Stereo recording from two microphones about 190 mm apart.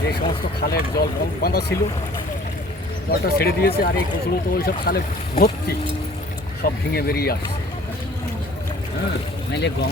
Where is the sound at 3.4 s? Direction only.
55° left (ahead or behind).